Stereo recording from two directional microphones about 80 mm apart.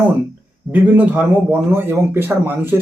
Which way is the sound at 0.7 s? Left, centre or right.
Right.